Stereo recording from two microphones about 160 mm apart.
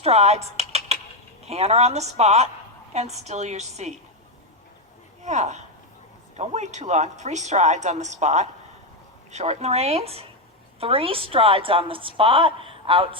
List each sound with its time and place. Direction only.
0.0 s typing: 40° right (ahead or behind)
1.5 s a woman's voice: 40° right (ahead or behind)
5.2 s a woman's voice: 45° right (ahead or behind)